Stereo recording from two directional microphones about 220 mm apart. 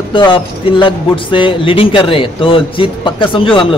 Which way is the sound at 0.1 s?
20° left (ahead or behind).